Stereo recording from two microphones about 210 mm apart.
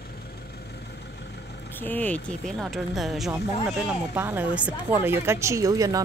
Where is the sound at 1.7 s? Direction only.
10° left (ahead or behind).